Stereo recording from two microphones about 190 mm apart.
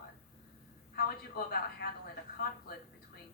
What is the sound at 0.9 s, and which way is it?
Speech, 55° left (ahead or behind).